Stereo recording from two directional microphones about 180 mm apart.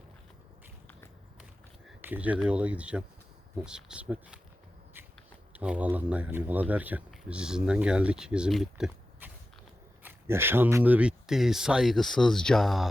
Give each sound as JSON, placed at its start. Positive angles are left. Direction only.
{"t": 2.0, "sound": "speech", "side_deg": -10}
{"t": 5.5, "sound": "speech", "side_deg": -10}